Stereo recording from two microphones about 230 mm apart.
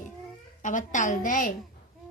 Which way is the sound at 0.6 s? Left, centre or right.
Left.